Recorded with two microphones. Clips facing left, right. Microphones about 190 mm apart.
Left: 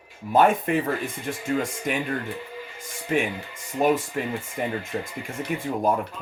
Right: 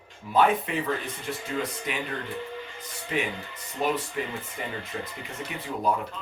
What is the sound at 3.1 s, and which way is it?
Speech, 50° left (ahead or behind).